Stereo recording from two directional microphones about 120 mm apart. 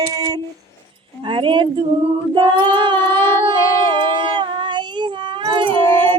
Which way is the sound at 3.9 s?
40° right (ahead or behind).